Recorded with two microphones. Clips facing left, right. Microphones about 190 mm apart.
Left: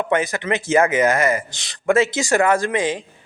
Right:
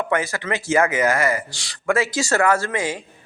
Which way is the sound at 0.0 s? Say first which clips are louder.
Left 2 dB; 20° left (ahead or behind).